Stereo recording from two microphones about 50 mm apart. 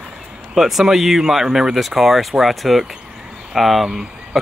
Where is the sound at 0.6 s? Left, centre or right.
Centre.